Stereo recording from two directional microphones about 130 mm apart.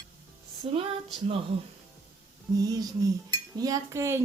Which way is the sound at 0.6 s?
45° right (ahead or behind).